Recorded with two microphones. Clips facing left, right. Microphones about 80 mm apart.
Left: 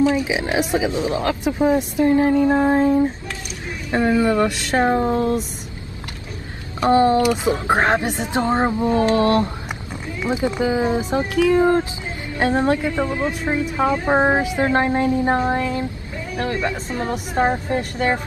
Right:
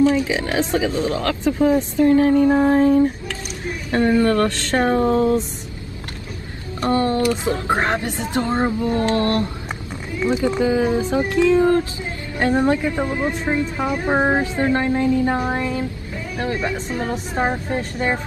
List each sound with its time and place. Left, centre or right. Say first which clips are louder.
0.0 s speech: right 1 dB; centre
6.8 s speech: left 4 dB; left
12.9 s speech: even; centre
13.5 s speech: left 4 dB; left
15.4 s speech: left 1 dB; centre